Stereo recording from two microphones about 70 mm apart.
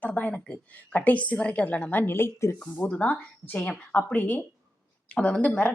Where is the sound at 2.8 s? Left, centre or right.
Left.